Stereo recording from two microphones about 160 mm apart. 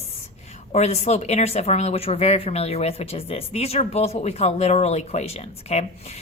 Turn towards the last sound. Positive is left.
turn(degrees=40)  # may be behind; listen again after turning